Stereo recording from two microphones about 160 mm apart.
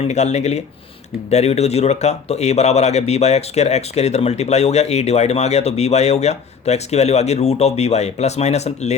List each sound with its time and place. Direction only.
0.0 s a man's voice: 45° left (ahead or behind)